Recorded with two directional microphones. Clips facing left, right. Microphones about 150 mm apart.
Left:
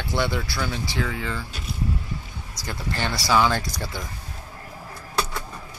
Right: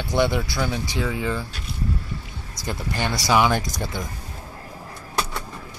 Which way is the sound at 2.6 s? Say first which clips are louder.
Right 2 dB; 20° right (ahead or behind).